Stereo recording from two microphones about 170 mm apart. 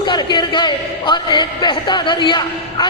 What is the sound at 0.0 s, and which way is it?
A man's voice, 25° left (ahead or behind).